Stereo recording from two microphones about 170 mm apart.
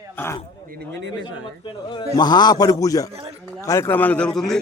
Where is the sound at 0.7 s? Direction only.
70° right (ahead or behind).